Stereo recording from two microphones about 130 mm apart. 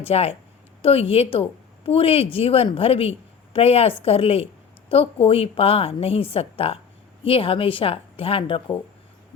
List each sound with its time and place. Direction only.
0.0 s a woman's voice: 50° left (ahead or behind)